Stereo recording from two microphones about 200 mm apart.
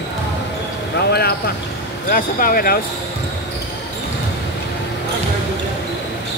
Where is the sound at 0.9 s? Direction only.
50° left (ahead or behind).